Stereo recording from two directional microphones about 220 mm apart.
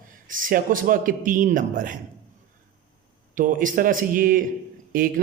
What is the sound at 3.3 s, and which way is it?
A man's voice, 35° right (ahead or behind).